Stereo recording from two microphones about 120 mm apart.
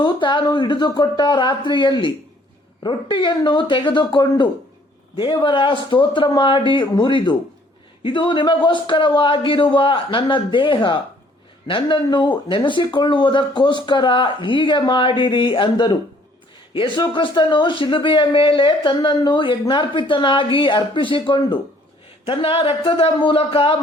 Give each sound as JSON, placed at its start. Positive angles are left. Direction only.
{"t": 0.0, "sound": "a man's voice", "side_deg": 40}